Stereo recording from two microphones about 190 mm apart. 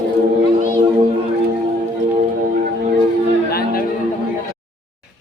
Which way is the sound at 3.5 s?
55° left (ahead or behind).